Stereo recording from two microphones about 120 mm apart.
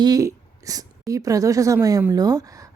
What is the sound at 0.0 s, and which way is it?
A woman's voice, 30° right (ahead or behind).